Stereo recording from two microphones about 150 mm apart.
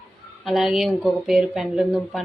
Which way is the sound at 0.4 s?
Centre (ahead or behind).